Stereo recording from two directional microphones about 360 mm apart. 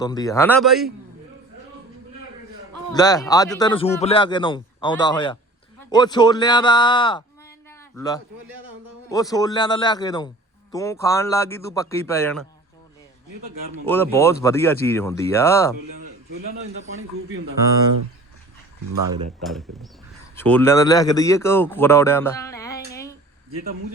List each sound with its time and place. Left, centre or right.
0.0 s speech: centre
2.9 s speech: centre
13.8 s speech: centre
16.8 s a man's voice: right
19.4 s speech: centre
22.9 s a sound: centre